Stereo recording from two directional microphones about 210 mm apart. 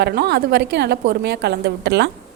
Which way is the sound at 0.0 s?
50° right (ahead or behind).